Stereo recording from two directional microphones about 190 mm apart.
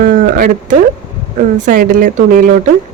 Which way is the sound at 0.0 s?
50° right (ahead or behind).